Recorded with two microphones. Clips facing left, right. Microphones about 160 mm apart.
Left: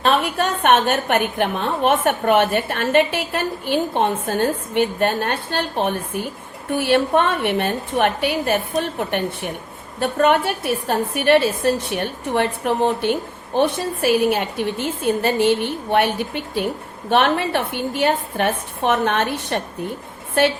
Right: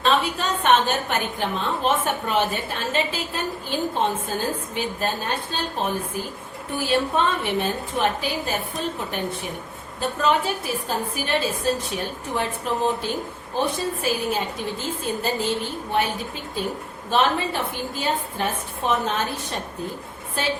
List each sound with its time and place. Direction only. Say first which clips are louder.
0.0 s a woman's voice: left 3 dB; 60° left (ahead or behind)